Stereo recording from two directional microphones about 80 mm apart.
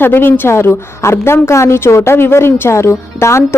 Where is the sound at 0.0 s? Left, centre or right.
Left.